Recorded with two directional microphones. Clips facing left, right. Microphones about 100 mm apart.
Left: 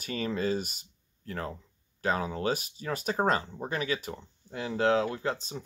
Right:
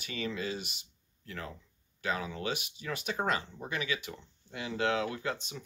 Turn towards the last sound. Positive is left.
turn(degrees=35)  # may be behind; listen again after turning